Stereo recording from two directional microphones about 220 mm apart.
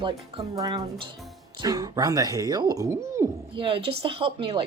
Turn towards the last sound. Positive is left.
turn(degrees=-25)  # may be behind; listen again after turning